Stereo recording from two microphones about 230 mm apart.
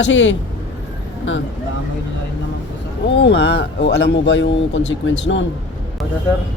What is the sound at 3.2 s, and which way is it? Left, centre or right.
Speech, left.